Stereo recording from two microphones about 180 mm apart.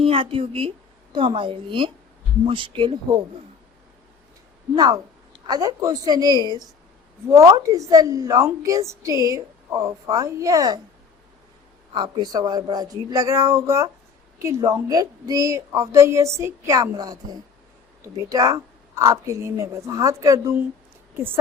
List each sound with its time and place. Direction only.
0.0 s speech: 30° right (ahead or behind)
4.7 s a woman's voice: 25° right (ahead or behind)
11.9 s a woman's voice: 25° right (ahead or behind)